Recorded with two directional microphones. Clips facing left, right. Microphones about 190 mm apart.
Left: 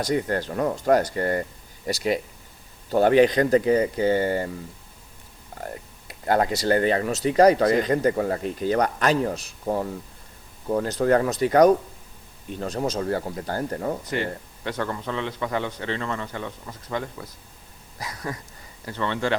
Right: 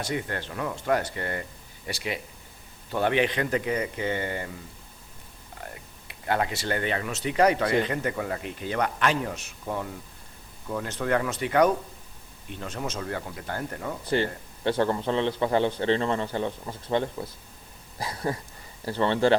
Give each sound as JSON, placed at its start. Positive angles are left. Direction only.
{"t": 0.0, "sound": "a man's voice", "side_deg": 40}
{"t": 6.1, "sound": "a man's voice", "side_deg": 40}
{"t": 14.0, "sound": "a man's voice", "side_deg": -30}